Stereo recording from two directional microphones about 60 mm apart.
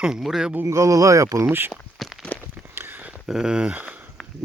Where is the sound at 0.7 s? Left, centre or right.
Right.